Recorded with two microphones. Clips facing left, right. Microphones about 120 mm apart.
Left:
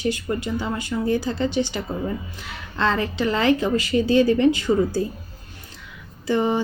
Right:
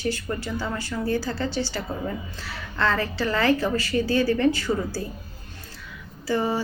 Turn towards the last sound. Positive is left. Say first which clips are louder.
# left 3 dB
turn(degrees=20)  # may be behind; listen again after turning